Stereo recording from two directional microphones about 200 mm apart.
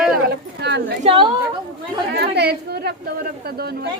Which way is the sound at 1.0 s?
25° right (ahead or behind).